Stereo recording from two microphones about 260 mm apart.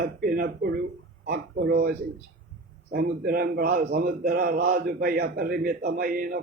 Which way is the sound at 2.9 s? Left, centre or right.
Right.